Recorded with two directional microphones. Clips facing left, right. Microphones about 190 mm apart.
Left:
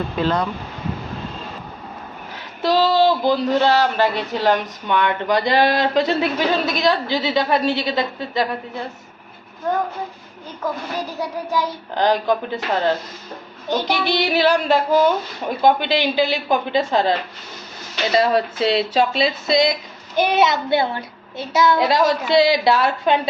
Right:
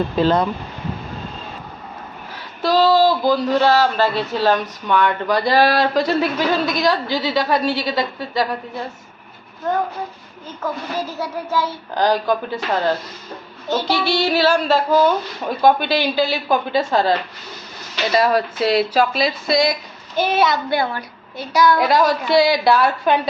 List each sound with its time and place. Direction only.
0.2 s speech: 35° right (ahead or behind)
2.6 s a child's voice: 20° left (ahead or behind)
10.9 s a child's voice: 15° left (ahead or behind)